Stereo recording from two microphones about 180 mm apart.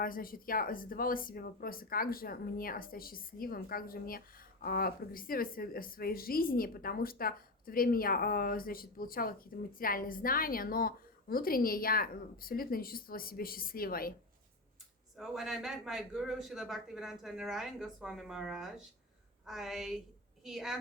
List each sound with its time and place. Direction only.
0.0 s a woman's voice: 50° left (ahead or behind)
15.2 s speech: centre (ahead or behind)